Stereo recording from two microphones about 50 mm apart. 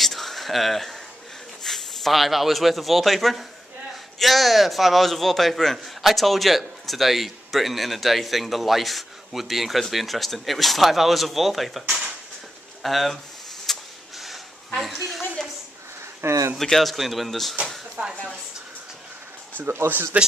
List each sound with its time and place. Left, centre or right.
0.0 s a sound: centre
1.6 s a man's voice: centre
12.8 s a man's voice: centre
13.7 s vehicle: centre
15.0 s a man's voice: centre
16.2 s speech: right
16.6 s a man's voice: centre
18.0 s speech: right
19.9 s speech: right